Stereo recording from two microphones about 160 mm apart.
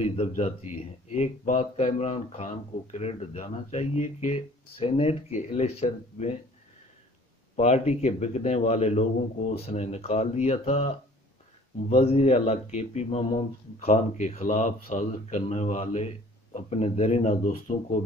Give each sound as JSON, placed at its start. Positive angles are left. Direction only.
{"t": 0.0, "sound": "speech", "side_deg": 40}
{"t": 7.5, "sound": "speech", "side_deg": 45}
{"t": 11.9, "sound": "speech", "side_deg": 40}